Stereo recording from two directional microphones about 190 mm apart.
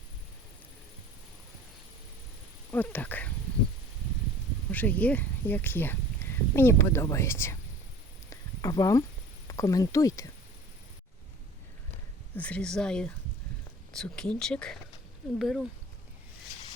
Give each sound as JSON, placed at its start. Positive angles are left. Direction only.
{"t": 2.7, "sound": "speech", "side_deg": 10}
{"t": 4.7, "sound": "speech", "side_deg": 10}
{"t": 8.3, "sound": "a sound", "side_deg": 20}
{"t": 9.5, "sound": "speech", "side_deg": 15}
{"t": 12.4, "sound": "speech", "side_deg": 5}